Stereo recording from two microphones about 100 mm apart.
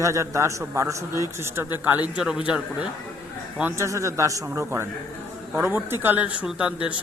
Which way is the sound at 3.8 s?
30° right (ahead or behind).